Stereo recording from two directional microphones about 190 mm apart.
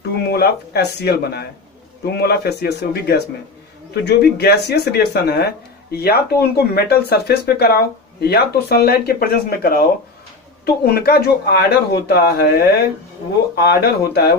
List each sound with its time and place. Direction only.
0.0 s speech: 55° left (ahead or behind)
13.6 s speech: 60° left (ahead or behind)